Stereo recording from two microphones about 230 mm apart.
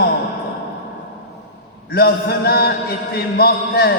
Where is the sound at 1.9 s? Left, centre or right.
Left.